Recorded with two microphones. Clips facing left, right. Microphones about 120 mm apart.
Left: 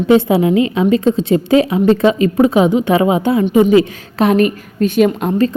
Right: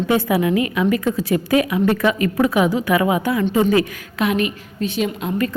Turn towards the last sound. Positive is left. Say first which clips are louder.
# left 9 dB
turn(degrees=50)  # may be behind; listen again after turning